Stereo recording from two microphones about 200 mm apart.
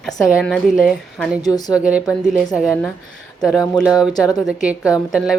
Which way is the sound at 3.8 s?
5° right (ahead or behind).